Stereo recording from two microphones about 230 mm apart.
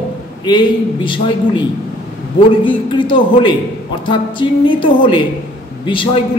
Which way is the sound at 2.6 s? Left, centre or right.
Left.